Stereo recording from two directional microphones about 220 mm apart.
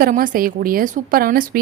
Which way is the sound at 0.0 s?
40° right (ahead or behind).